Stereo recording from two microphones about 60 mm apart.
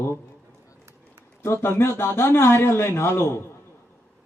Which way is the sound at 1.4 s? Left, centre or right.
Left.